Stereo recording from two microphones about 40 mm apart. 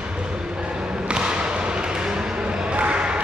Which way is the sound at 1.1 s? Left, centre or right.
Right.